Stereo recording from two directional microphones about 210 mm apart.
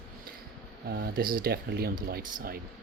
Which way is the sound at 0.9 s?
45° right (ahead or behind).